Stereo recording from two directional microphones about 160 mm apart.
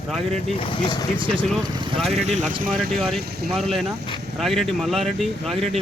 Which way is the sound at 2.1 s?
45° right (ahead or behind).